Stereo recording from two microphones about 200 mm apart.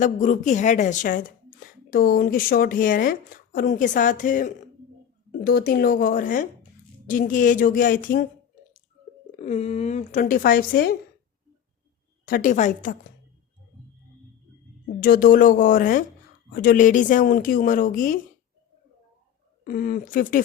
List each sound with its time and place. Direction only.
0.0 s a woman's voice: 40° left (ahead or behind)
9.4 s a woman's voice: 35° left (ahead or behind)
12.2 s a woman's voice: 45° left (ahead or behind)
15.0 s speech: 45° left (ahead or behind)
19.6 s speech: 45° left (ahead or behind)